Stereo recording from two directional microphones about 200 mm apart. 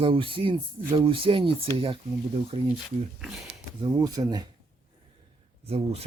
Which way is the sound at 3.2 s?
Centre (ahead or behind).